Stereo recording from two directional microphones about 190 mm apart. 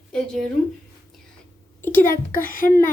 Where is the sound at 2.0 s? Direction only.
45° left (ahead or behind).